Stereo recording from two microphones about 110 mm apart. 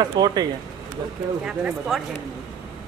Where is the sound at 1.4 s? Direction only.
5° right (ahead or behind).